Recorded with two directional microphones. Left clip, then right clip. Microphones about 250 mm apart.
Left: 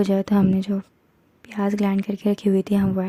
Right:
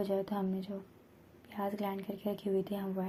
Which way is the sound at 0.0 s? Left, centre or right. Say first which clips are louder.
Left 12 dB; left.